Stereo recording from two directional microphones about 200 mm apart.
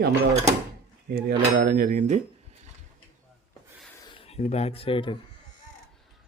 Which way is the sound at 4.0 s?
25° left (ahead or behind).